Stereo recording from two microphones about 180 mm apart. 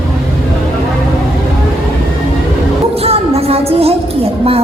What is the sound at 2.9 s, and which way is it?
Music, 35° right (ahead or behind).